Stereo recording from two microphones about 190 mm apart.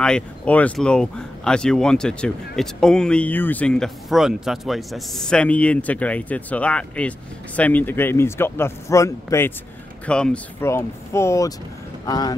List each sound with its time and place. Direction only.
0.0 s speech: 5° left (ahead or behind)